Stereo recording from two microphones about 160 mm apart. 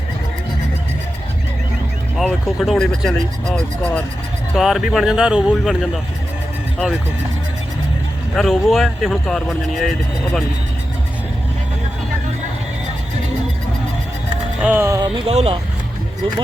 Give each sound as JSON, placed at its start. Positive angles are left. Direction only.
{"t": 2.1, "sound": "speech", "side_deg": 0}
{"t": 8.4, "sound": "speech", "side_deg": 0}
{"t": 14.6, "sound": "speech", "side_deg": -10}